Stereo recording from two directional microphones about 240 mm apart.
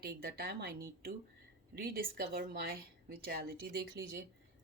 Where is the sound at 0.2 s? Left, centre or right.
Right.